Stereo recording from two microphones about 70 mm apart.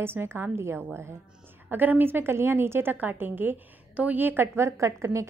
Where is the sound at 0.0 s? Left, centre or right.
Right.